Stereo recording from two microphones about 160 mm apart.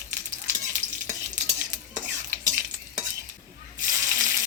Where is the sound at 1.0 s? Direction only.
15° right (ahead or behind).